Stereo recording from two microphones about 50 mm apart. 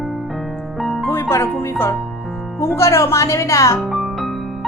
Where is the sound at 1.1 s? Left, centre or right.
Left.